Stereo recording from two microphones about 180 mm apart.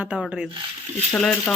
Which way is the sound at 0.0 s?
5° right (ahead or behind).